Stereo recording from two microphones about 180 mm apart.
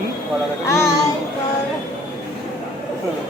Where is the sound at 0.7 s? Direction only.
15° left (ahead or behind).